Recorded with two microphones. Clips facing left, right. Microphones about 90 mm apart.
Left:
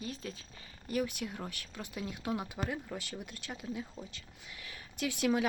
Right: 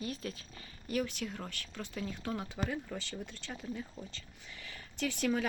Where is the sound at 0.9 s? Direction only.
10° left (ahead or behind).